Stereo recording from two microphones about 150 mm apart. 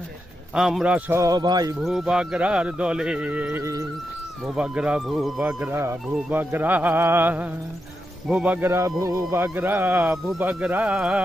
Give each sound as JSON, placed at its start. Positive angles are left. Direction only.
{"t": 0.6, "sound": "speech", "side_deg": -5}
{"t": 1.2, "sound": "speech", "side_deg": -25}
{"t": 1.8, "sound": "speech", "side_deg": 0}